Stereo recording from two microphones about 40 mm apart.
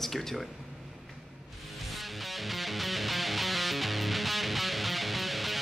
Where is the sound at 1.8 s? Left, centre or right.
Centre.